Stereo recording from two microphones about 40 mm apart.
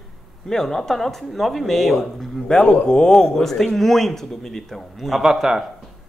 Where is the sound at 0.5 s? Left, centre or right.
Centre.